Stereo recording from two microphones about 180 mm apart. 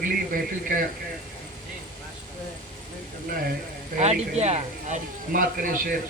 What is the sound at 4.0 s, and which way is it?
Speech, 35° right (ahead or behind).